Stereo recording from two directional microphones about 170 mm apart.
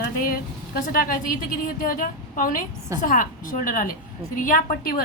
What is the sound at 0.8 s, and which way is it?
A woman's voice, 55° left (ahead or behind).